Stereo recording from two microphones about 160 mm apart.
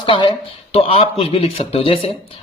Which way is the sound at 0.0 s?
30° left (ahead or behind).